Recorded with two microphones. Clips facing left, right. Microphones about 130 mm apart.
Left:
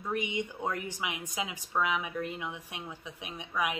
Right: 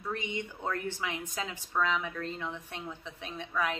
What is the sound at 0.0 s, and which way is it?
A woman's voice, 15° left (ahead or behind).